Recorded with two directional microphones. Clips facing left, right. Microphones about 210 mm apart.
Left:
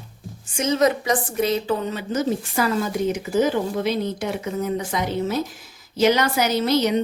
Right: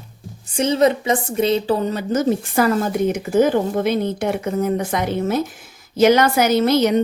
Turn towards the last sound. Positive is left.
turn(degrees=-50)  # may be behind; listen again after turning